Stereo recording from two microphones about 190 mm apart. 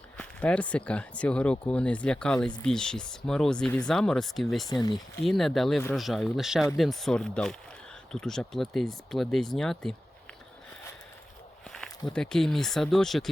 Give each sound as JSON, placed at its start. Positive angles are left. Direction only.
{"t": 0.2, "sound": "speech", "side_deg": 5}
{"t": 4.7, "sound": "speech", "side_deg": 25}
{"t": 5.2, "sound": "speech", "side_deg": 0}
{"t": 11.7, "sound": "speech", "side_deg": 5}